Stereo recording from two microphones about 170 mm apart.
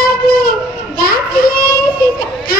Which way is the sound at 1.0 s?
60° left (ahead or behind).